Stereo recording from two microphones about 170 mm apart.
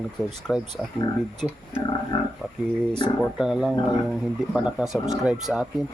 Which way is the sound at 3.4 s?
5° right (ahead or behind).